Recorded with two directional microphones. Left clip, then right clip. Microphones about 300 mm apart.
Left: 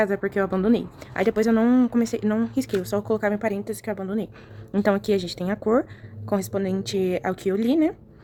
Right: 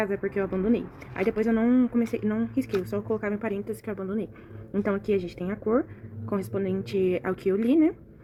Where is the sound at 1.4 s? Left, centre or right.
Centre.